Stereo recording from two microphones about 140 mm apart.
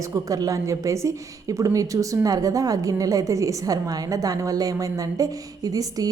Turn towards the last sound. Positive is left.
turn(degrees=-25)  # may be behind; listen again after turning